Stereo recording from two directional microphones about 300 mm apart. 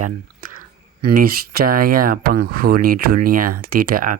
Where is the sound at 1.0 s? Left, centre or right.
Right.